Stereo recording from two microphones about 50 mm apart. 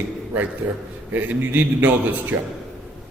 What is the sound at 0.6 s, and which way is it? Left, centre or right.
A man's voice, right.